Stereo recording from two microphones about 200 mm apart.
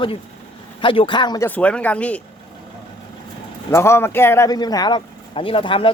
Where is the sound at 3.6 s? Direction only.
15° left (ahead or behind).